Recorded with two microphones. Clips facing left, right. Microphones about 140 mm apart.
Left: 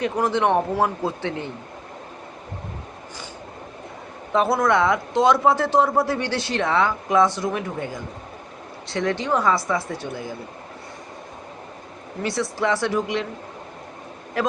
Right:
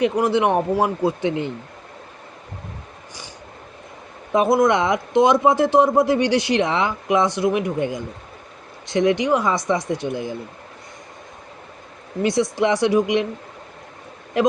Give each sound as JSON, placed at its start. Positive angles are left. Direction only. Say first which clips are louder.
{"t": 0.0, "sound": "speech", "louder": "right 3 dB", "side_deg": -10}
{"t": 4.3, "sound": "speech", "louder": "right 3 dB", "side_deg": -15}
{"t": 12.2, "sound": "speech", "louder": "right 5 dB", "side_deg": -15}
{"t": 14.4, "sound": "speech", "louder": "right 6 dB", "side_deg": -20}